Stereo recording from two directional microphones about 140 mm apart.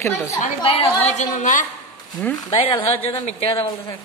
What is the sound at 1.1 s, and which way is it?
Speech, 60° left (ahead or behind).